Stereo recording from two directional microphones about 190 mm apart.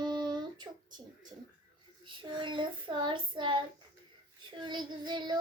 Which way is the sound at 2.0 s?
25° right (ahead or behind).